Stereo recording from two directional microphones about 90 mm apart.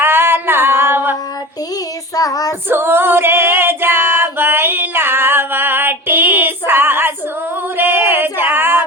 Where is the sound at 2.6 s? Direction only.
25° right (ahead or behind).